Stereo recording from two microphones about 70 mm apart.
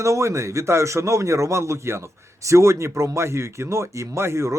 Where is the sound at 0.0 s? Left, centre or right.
Right.